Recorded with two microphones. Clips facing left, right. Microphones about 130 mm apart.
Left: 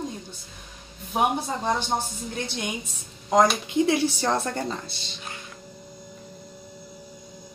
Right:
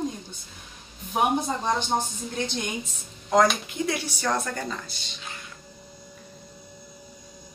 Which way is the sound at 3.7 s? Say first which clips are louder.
Left 7 dB; 25° left (ahead or behind).